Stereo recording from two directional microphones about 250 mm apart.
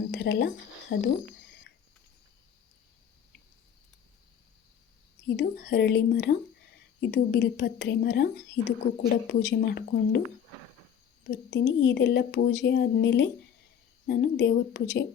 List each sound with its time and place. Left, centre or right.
0.1 s a sound: left
5.4 s speech: left
11.2 s speech: left